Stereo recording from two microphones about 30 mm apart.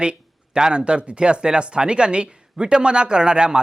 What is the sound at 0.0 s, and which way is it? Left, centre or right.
Speech, right.